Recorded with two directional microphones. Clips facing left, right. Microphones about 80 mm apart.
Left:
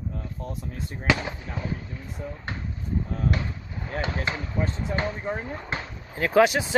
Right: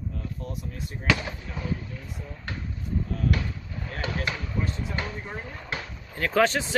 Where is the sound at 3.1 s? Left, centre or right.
Left.